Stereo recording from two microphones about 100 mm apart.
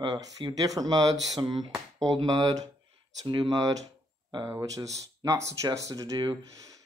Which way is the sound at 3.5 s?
35° right (ahead or behind).